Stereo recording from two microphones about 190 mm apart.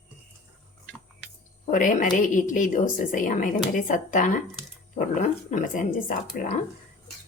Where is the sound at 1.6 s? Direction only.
45° left (ahead or behind).